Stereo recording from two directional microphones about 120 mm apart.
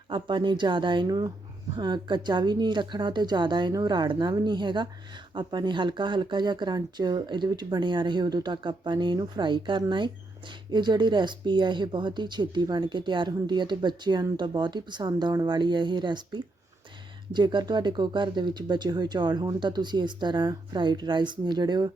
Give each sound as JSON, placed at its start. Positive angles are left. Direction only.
{"t": 0.1, "sound": "speech", "side_deg": -40}